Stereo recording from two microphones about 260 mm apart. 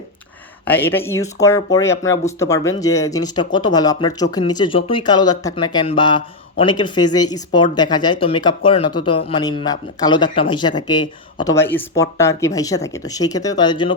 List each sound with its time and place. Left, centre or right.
0.6 s speech: centre